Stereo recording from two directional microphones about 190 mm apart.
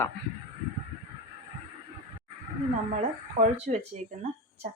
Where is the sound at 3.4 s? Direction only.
35° right (ahead or behind).